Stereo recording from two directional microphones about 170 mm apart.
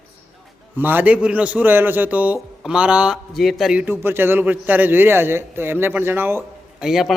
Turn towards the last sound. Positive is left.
turn(degrees=0)  # may be behind; listen again after turning